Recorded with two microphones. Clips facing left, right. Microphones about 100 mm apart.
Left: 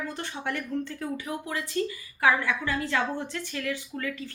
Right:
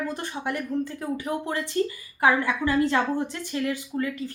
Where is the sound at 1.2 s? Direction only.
30° right (ahead or behind).